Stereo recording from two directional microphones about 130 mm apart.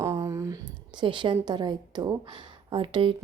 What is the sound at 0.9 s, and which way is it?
A woman's voice, 40° right (ahead or behind).